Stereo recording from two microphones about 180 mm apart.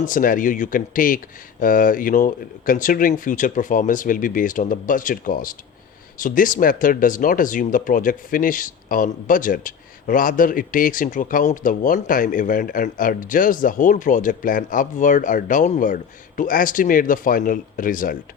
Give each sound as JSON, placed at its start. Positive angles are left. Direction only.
{"t": 0.0, "sound": "speech", "side_deg": 50}